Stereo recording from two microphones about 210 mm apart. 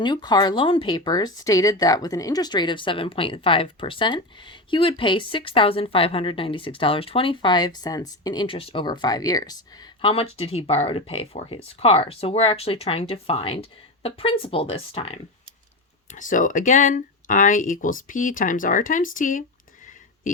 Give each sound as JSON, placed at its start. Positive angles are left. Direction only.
{"t": 0.0, "sound": "speech", "side_deg": 20}
{"t": 16.1, "sound": "speech", "side_deg": 40}